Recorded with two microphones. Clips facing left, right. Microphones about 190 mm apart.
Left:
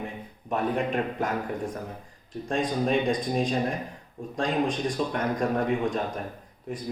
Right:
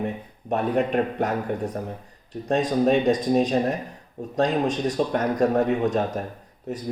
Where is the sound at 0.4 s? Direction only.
40° right (ahead or behind).